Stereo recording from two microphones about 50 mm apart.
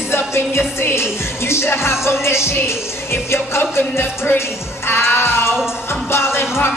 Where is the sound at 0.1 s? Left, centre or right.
Left.